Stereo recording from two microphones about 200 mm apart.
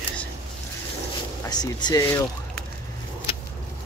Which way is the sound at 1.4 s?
20° left (ahead or behind).